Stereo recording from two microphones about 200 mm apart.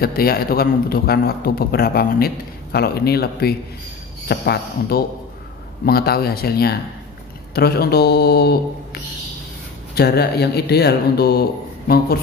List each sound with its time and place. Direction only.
0.0 s a man's voice: 50° left (ahead or behind)